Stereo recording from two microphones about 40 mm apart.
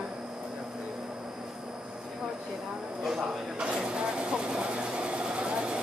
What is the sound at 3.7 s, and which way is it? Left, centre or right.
Vehicle, right.